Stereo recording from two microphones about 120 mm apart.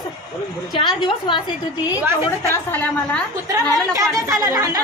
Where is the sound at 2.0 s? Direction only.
20° right (ahead or behind).